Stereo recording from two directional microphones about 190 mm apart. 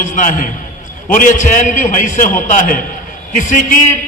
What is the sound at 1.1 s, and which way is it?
A man's voice, 45° left (ahead or behind).